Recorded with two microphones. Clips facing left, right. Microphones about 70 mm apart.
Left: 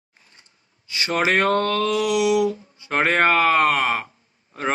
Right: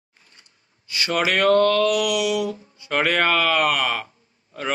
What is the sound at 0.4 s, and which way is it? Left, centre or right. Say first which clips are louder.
Speech: even; left.